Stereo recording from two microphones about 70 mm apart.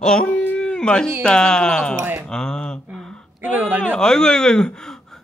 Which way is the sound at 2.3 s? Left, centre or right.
Centre.